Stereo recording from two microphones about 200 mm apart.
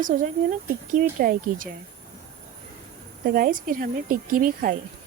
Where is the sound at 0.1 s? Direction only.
35° right (ahead or behind).